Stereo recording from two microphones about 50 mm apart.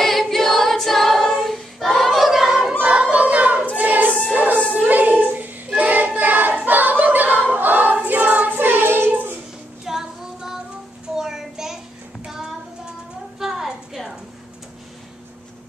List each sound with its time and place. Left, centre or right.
0.0 s a capella: centre
2.0 s choir: centre
2.8 s music: right
3.7 s choir: right
4.4 s music: right
4.8 s choir: right
7.5 s singing: right
9.8 s child singing: centre
13.4 s a sound: centre